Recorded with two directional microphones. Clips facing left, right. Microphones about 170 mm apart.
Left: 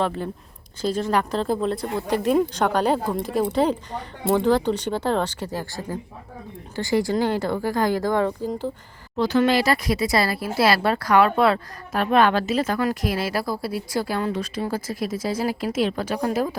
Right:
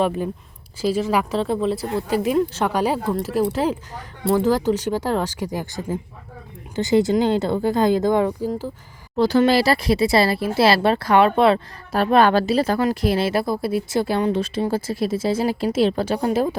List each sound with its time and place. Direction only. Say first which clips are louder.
0.8 s speech: right 2 dB; 10° right (ahead or behind)
9.1 s speech: right 3 dB; 35° right (ahead or behind)